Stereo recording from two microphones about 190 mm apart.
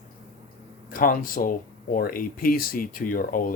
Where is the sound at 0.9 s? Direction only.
45° left (ahead or behind).